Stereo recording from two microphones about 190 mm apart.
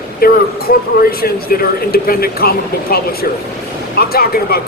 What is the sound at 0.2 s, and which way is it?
Speech, 50° left (ahead or behind).